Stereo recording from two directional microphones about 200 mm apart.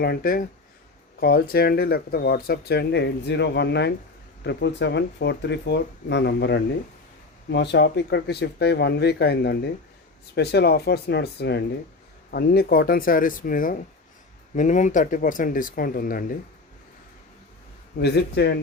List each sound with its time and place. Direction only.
0.0 s speech: 50° left (ahead or behind)
18.0 s speech: 55° left (ahead or behind)